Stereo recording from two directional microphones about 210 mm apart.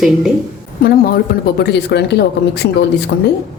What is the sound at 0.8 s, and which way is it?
Speech, 45° left (ahead or behind).